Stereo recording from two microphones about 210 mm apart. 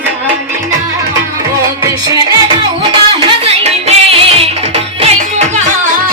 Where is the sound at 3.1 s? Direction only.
25° right (ahead or behind).